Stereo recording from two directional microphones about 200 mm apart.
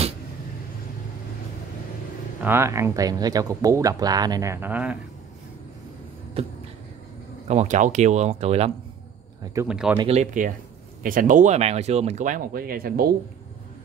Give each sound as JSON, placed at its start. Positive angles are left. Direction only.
{"t": 2.4, "sound": "speech", "side_deg": -10}
{"t": 7.4, "sound": "speech", "side_deg": -35}
{"t": 9.4, "sound": "speech", "side_deg": -15}
{"t": 9.7, "sound": "speech", "side_deg": -5}
{"t": 9.9, "sound": "speech", "side_deg": -30}